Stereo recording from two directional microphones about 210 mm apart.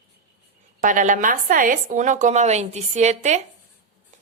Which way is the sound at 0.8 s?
40° right (ahead or behind).